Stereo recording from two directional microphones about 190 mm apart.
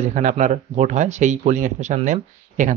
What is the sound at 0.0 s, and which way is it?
Speech, 40° right (ahead or behind).